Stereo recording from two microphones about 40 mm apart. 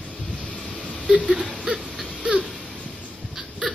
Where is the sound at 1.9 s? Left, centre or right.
Centre.